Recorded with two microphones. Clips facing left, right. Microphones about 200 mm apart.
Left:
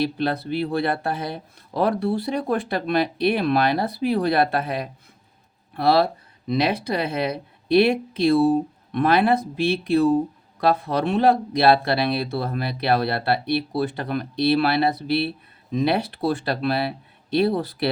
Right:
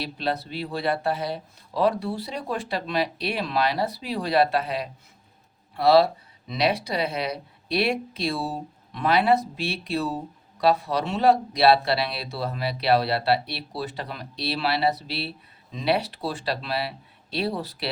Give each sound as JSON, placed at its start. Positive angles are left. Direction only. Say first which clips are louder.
{"t": 0.0, "sound": "speech", "louder": "left 5 dB", "side_deg": 55}